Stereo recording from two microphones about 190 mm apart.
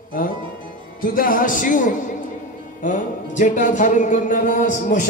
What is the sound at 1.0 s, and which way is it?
Music, 45° left (ahead or behind).